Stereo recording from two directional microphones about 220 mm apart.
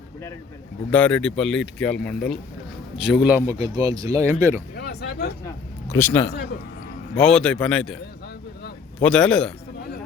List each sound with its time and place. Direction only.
0.9 s speech: 5° left (ahead or behind); by 4.6 s 15° right (ahead or behind)
4.8 s a sound: 45° left (ahead or behind)
5.5 s speech: 10° left (ahead or behind)
9.0 s speech: 5° left (ahead or behind)